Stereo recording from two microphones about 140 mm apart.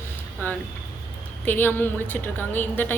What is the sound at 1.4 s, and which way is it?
A woman's voice, 15° left (ahead or behind).